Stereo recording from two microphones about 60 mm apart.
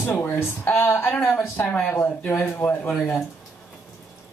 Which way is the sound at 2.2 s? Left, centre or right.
Left.